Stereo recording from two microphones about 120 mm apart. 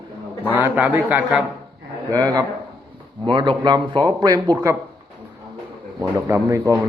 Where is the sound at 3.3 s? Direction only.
40° right (ahead or behind).